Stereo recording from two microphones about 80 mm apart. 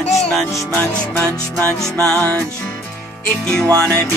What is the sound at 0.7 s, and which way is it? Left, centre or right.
Music, left.